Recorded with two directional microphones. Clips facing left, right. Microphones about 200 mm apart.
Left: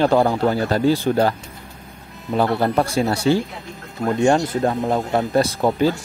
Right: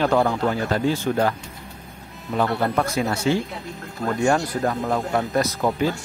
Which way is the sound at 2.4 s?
35° left (ahead or behind).